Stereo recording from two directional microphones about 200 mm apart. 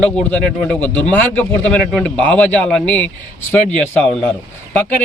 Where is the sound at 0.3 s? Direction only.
5° left (ahead or behind).